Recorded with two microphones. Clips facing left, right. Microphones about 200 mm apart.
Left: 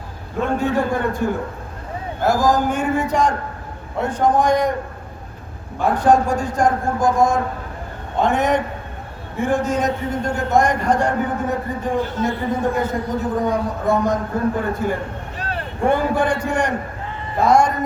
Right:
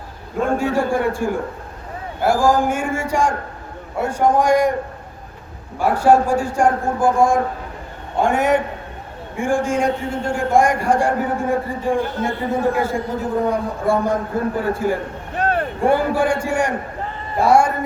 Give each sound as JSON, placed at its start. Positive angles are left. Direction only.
{"t": 0.8, "sound": "a man's voice", "side_deg": -10}
{"t": 5.8, "sound": "a man's voice", "side_deg": -10}
{"t": 15.4, "sound": "a sound", "side_deg": -55}
{"t": 15.8, "sound": "a man's voice", "side_deg": -10}